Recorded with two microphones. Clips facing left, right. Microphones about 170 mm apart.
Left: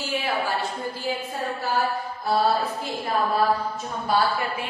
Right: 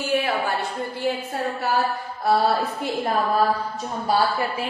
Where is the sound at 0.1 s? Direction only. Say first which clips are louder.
Right 3 dB; 60° right (ahead or behind).